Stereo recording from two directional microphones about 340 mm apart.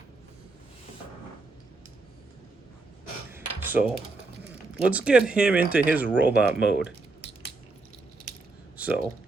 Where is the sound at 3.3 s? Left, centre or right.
Centre.